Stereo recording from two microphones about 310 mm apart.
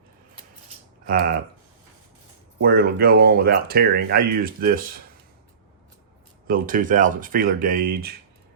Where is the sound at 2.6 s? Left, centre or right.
Right.